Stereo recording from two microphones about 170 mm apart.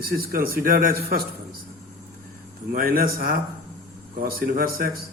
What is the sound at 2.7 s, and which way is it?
A man's voice, 60° right (ahead or behind).